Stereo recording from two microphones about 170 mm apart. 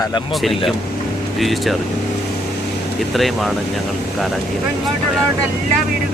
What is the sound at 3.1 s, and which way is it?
Speech, centre (ahead or behind).